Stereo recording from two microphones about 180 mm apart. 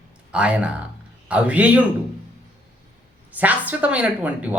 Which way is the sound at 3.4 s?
10° right (ahead or behind).